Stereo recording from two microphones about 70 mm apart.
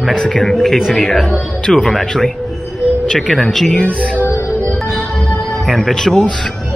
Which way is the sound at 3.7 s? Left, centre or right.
Centre.